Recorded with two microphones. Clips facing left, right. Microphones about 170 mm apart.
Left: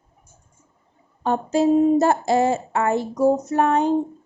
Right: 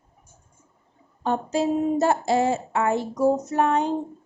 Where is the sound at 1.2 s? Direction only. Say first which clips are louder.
Left 4 dB; 45° left (ahead or behind).